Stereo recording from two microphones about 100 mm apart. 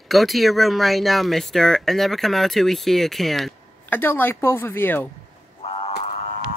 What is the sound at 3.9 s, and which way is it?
A woman's voice, 20° left (ahead or behind).